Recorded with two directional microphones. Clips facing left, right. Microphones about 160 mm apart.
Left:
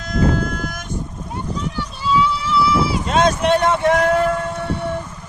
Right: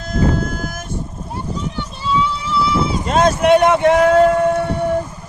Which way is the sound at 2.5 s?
Centre (ahead or behind).